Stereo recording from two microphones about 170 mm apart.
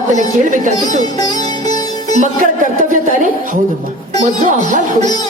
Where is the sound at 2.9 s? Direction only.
50° right (ahead or behind).